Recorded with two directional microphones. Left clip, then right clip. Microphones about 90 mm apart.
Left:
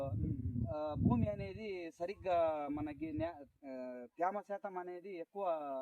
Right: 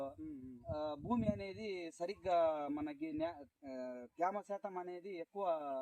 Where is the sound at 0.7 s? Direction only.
20° right (ahead or behind).